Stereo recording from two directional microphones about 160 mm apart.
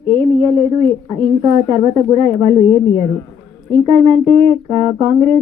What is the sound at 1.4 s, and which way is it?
Speech, 35° right (ahead or behind).